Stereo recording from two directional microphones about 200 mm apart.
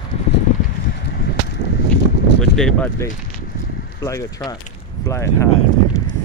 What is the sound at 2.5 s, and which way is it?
Speech, centre (ahead or behind).